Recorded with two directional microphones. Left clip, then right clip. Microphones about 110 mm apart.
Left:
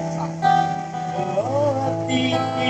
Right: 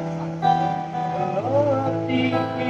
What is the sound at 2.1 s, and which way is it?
Music, 25° left (ahead or behind).